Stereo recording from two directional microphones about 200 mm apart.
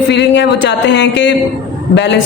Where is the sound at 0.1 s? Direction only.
60° left (ahead or behind).